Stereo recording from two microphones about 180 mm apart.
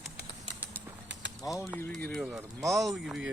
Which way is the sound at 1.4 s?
15° left (ahead or behind).